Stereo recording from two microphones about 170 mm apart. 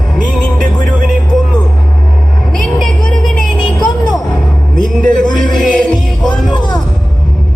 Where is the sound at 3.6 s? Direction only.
25° left (ahead or behind).